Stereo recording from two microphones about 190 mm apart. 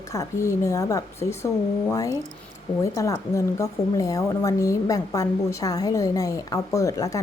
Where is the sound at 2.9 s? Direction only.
15° left (ahead or behind).